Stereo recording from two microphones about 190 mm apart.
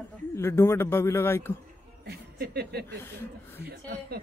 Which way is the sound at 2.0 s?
55° right (ahead or behind).